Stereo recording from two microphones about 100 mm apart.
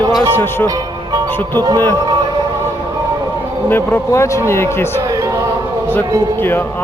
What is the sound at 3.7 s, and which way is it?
Speech, 25° left (ahead or behind).